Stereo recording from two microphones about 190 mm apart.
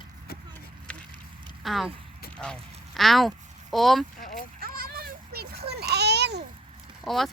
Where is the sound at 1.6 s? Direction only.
Centre (ahead or behind).